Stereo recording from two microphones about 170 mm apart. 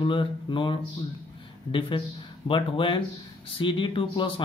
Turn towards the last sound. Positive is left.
turn(degrees=30)  # may be behind; listen again after turning